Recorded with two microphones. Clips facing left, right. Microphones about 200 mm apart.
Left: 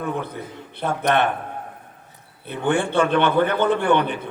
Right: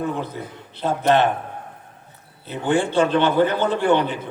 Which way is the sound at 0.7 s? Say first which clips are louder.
Right 2 dB; 55° left (ahead or behind).